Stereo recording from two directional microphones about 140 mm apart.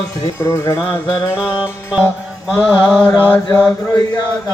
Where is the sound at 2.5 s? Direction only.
15° left (ahead or behind).